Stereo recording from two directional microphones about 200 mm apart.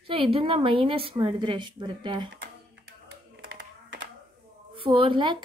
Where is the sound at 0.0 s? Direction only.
25° right (ahead or behind).